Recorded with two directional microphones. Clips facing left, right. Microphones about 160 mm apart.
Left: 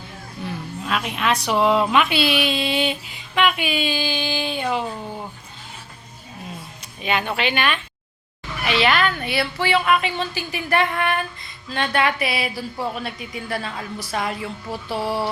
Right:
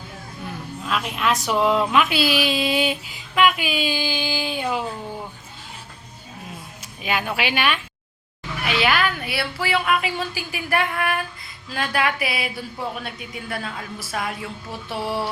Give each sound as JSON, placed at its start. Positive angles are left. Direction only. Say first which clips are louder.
{"t": 0.4, "sound": "a woman's voice", "louder": "left 2 dB", "side_deg": 0}
{"t": 7.0, "sound": "a woman's voice", "louder": "left 2 dB", "side_deg": -5}